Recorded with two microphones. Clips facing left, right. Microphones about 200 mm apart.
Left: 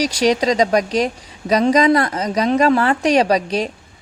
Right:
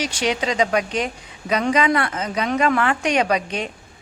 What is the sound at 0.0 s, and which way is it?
A woman's voice, 40° left (ahead or behind).